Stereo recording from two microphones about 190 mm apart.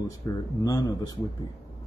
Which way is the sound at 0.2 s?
15° left (ahead or behind).